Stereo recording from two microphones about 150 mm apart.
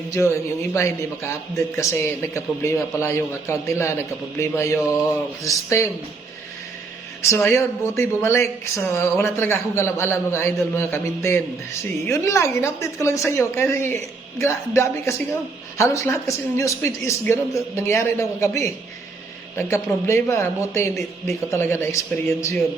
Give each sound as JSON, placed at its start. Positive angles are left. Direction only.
{"t": 0.1, "sound": "a woman's voice", "side_deg": 20}
{"t": 7.5, "sound": "a woman's voice", "side_deg": 20}